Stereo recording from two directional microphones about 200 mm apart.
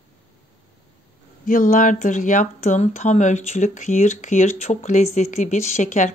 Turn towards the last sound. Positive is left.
turn(degrees=35)  # may be behind; listen again after turning